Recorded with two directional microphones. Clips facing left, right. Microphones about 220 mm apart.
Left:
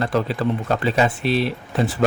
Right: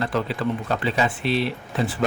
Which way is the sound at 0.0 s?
40° left (ahead or behind).